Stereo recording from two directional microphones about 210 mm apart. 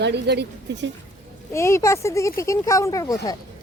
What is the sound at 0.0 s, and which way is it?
Speech, 55° right (ahead or behind).